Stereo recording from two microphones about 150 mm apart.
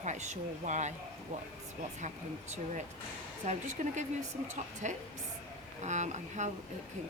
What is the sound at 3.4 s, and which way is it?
Speech, 55° right (ahead or behind).